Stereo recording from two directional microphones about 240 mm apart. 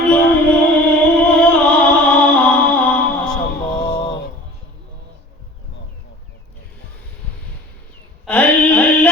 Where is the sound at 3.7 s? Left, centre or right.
Centre.